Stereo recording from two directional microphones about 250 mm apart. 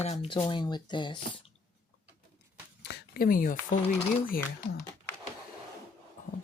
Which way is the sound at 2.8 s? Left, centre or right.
Left.